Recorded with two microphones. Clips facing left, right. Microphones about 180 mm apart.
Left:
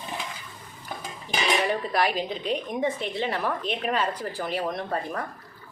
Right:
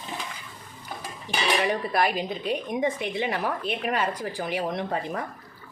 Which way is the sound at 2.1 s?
5° right (ahead or behind).